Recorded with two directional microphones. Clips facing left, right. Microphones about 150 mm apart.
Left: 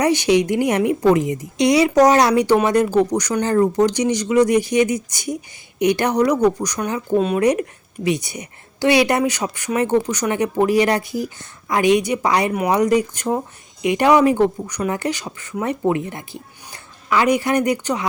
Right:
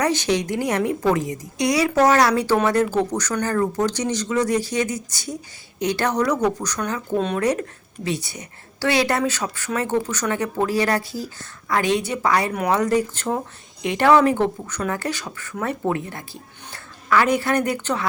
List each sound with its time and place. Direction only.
0.0 s speech: 15° left (ahead or behind)